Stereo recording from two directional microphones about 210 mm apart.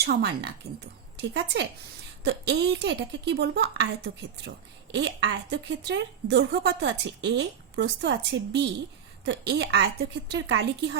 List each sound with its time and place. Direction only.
0.0 s a woman's voice: 50° right (ahead or behind)